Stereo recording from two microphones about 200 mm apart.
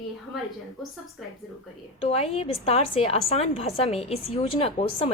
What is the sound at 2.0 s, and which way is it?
A woman's voice, 30° left (ahead or behind).